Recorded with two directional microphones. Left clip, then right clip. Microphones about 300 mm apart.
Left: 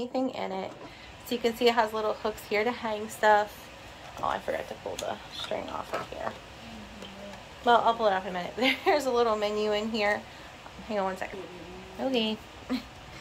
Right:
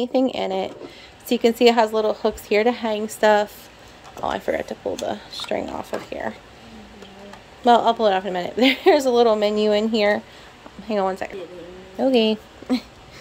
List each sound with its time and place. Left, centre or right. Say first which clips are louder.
0.0 s a woman's voice: right 10 dB; right
7.6 s a woman's voice: right 7 dB; right